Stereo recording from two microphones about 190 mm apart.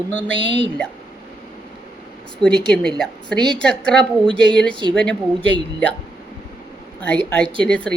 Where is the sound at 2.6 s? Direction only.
5° left (ahead or behind).